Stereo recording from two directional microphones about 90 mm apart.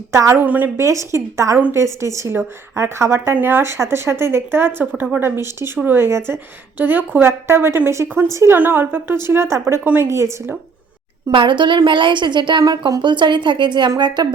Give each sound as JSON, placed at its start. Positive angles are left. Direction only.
{"t": 0.1, "sound": "a woman's voice", "side_deg": -30}
{"t": 0.4, "sound": "a woman's voice", "side_deg": -20}
{"t": 0.8, "sound": "a woman's voice", "side_deg": -35}
{"t": 8.0, "sound": "a woman's voice", "side_deg": -20}
{"t": 8.3, "sound": "a woman's voice", "side_deg": -35}
{"t": 8.5, "sound": "a woman's voice", "side_deg": -20}
{"t": 9.8, "sound": "a woman's voice", "side_deg": -20}
{"t": 10.1, "sound": "a woman's voice", "side_deg": -30}
{"t": 11.3, "sound": "a woman's voice", "side_deg": -65}